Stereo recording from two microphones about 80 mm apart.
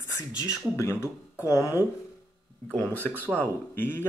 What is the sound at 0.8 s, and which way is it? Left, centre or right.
Speech, left.